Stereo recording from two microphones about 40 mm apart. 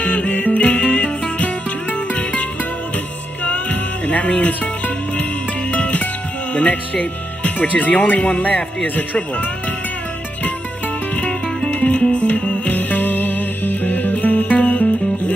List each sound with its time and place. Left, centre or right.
0.0 s music: left
4.1 s music: left
6.5 s speech: left
11.1 s music: left